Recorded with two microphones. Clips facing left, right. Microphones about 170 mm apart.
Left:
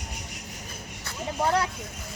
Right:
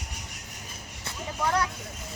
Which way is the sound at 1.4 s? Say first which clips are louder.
Left 2 dB; 25° left (ahead or behind).